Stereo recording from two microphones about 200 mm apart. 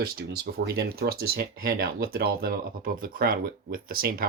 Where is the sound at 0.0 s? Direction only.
50° right (ahead or behind).